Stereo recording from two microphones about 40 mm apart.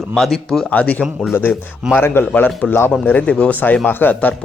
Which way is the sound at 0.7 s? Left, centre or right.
Left.